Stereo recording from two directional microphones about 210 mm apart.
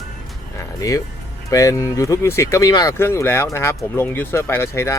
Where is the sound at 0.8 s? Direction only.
15° left (ahead or behind).